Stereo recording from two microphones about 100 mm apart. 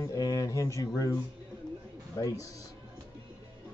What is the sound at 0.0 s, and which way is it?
Music, 35° left (ahead or behind).